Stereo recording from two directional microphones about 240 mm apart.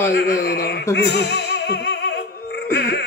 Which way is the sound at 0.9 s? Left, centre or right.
Left.